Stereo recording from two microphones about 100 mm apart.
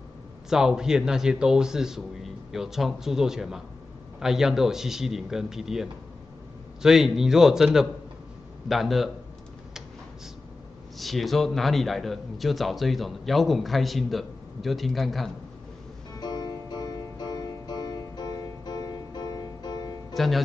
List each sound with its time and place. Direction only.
0.5 s a man's voice: 5° right (ahead or behind)
11.0 s a man's voice: centre (ahead or behind)
16.2 s music: 45° left (ahead or behind)
20.2 s a man's voice: centre (ahead or behind)